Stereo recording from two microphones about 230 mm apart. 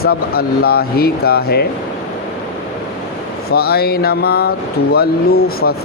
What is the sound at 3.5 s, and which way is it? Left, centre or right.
Speech, left.